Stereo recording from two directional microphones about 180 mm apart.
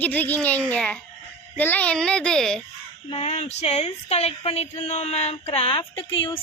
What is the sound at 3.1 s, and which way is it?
Speech, 35° left (ahead or behind).